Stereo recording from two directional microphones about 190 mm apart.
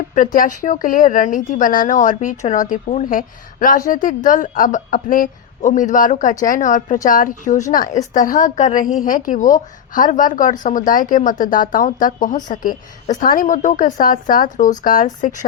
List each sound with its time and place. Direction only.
0.1 s speech: 45° left (ahead or behind)